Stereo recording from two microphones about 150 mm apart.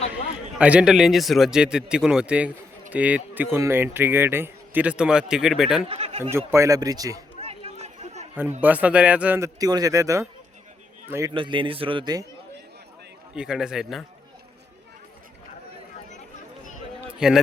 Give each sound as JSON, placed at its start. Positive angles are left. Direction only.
{"t": 0.6, "sound": "speech", "side_deg": -5}
{"t": 5.9, "sound": "speech", "side_deg": -40}
{"t": 6.5, "sound": "speech", "side_deg": -20}
{"t": 7.3, "sound": "chatter", "side_deg": -40}
{"t": 8.6, "sound": "speech", "side_deg": -10}
{"t": 9.6, "sound": "speech", "side_deg": -25}
{"t": 11.3, "sound": "a man's voice", "side_deg": -35}
{"t": 13.3, "sound": "speech", "side_deg": -5}
{"t": 17.2, "sound": "a man's voice", "side_deg": -5}